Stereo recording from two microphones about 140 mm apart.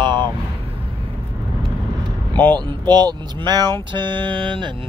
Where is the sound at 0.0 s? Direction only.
35° right (ahead or behind).